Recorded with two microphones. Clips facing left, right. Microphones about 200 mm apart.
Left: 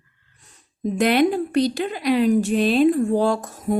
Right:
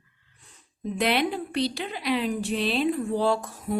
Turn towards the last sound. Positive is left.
turn(degrees=45)  # may be behind; listen again after turning